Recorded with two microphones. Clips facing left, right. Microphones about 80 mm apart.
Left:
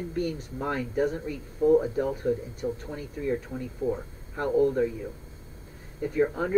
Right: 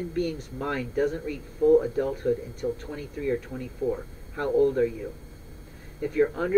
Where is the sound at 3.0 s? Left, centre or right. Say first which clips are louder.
Right 1 dB; left.